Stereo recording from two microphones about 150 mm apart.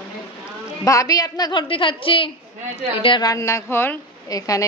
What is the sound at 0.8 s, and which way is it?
A woman's voice, 20° left (ahead or behind).